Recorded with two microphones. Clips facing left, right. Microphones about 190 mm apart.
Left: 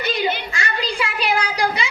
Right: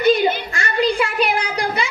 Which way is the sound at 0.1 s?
55° right (ahead or behind).